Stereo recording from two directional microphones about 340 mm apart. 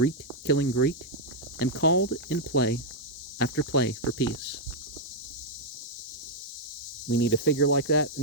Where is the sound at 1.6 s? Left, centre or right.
Left.